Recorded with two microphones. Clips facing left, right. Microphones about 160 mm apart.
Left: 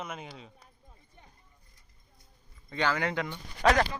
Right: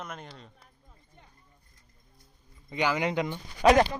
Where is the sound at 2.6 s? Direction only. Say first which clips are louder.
Right 2 dB; 15° right (ahead or behind).